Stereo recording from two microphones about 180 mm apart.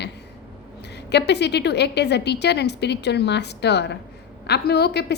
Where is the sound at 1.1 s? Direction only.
70° left (ahead or behind).